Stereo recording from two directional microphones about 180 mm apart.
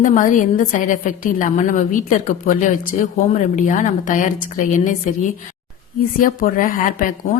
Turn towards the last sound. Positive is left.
turn(degrees=50)  # may be behind; listen again after turning